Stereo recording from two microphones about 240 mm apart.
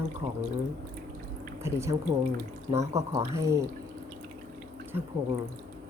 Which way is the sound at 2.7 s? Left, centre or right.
Right.